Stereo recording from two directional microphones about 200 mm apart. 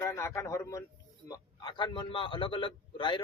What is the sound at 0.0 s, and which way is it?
A man's voice, 15° left (ahead or behind).